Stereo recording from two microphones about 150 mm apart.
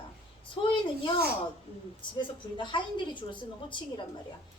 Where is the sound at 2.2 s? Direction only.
30° left (ahead or behind).